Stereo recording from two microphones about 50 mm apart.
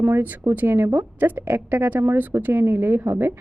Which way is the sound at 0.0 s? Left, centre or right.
Right.